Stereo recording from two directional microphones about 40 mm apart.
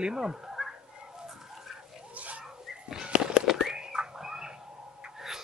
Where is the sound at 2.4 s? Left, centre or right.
Centre.